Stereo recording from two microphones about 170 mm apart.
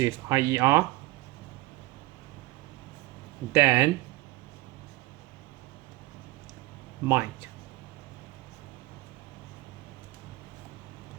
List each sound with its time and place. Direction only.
0.0 s speech: 15° right (ahead or behind)
3.5 s speech: 10° right (ahead or behind)
7.0 s speech: 15° right (ahead or behind)